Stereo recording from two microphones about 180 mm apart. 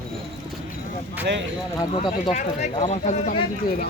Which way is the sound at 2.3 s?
40° left (ahead or behind).